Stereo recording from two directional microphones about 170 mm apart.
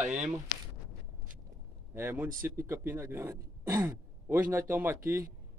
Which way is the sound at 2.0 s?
15° right (ahead or behind).